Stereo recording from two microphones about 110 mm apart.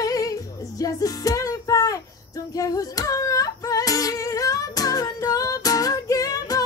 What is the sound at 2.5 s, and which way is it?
Singing, 35° left (ahead or behind).